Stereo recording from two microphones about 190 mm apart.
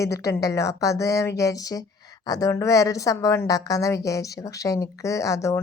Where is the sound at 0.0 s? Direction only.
15° left (ahead or behind).